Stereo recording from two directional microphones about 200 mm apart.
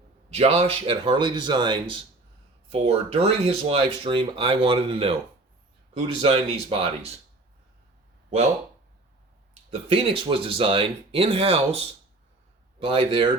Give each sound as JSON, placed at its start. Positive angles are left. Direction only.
{"t": 0.3, "sound": "speech", "side_deg": -30}
{"t": 9.6, "sound": "speech", "side_deg": -30}